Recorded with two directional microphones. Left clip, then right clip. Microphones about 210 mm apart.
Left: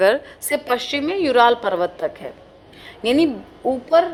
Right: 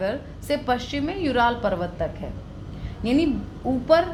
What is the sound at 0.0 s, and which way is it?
A woman's voice, 50° left (ahead or behind).